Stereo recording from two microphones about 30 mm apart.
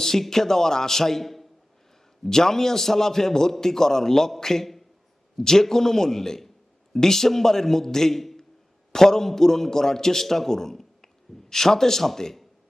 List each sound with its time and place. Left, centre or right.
0.0 s a man's voice: centre
2.2 s a man's voice: centre
8.9 s a man's voice: centre